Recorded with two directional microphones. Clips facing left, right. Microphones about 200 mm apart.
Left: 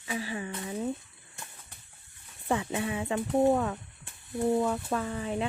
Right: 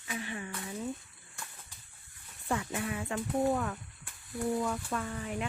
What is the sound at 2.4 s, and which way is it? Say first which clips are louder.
Speech: left 4 dB; 25° left (ahead or behind).